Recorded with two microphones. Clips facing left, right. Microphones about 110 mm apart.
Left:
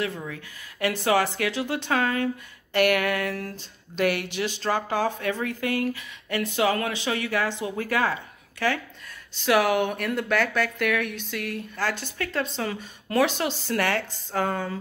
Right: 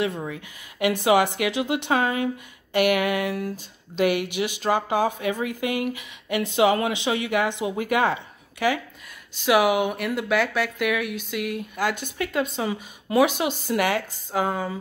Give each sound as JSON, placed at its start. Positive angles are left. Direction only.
{"t": 0.3, "sound": "speech", "side_deg": -15}